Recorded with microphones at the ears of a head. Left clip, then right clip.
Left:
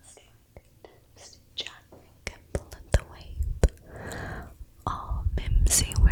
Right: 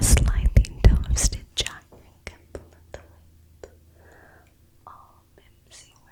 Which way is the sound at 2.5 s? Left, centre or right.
Left.